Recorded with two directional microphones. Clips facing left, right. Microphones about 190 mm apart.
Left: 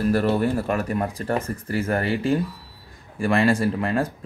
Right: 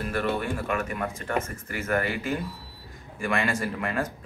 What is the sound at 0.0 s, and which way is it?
Speech, 40° left (ahead or behind).